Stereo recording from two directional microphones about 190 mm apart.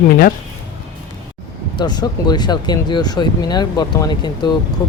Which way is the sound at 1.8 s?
20° left (ahead or behind).